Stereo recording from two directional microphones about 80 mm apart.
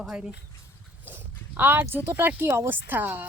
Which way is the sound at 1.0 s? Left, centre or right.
Right.